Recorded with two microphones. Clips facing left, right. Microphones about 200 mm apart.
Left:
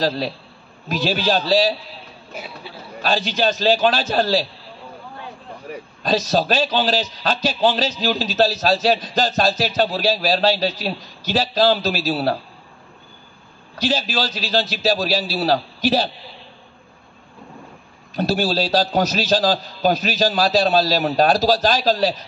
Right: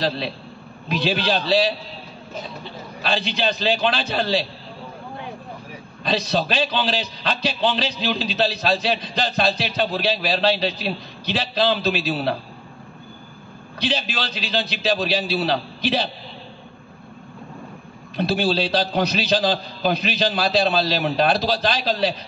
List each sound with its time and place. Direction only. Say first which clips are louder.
0.8 s a man's voice: left 1 dB; 45° left (ahead or behind)
2.3 s speech: right 1 dB; 10° left (ahead or behind)
3.0 s a man's voice: left 3 dB; 45° left (ahead or behind)
6.0 s a man's voice: left 3 dB; 45° left (ahead or behind)
13.8 s a man's voice: left 4 dB; 45° left (ahead or behind)
18.1 s a man's voice: left 1 dB; 45° left (ahead or behind)